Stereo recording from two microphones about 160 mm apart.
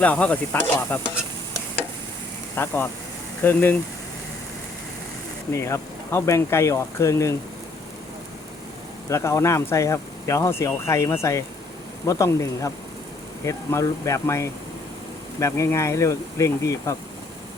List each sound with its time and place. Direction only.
0.0 s speech: 10° left (ahead or behind)
2.6 s speech: 15° left (ahead or behind)
5.5 s speech: 20° left (ahead or behind)
9.0 s speech: 20° left (ahead or behind)